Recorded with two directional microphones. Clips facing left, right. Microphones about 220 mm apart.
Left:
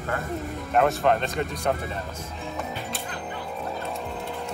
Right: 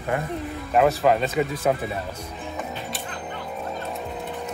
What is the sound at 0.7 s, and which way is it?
Speech, centre (ahead or behind).